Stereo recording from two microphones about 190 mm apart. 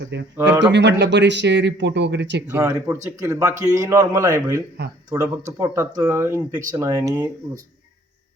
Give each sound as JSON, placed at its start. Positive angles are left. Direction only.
{"t": 0.3, "sound": "speech", "side_deg": -15}
{"t": 0.7, "sound": "speech", "side_deg": -65}
{"t": 2.5, "sound": "speech", "side_deg": -15}